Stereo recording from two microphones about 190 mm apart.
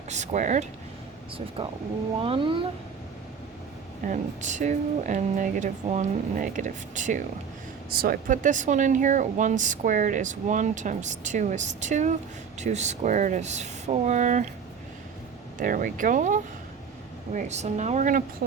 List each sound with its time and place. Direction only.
0.1 s speech: 40° right (ahead or behind)
2.2 s speech: 25° right (ahead or behind)
4.0 s speech: 40° right (ahead or behind)
15.5 s speech: 45° right (ahead or behind)